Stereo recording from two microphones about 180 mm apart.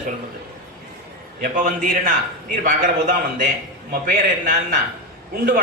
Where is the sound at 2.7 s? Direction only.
50° right (ahead or behind).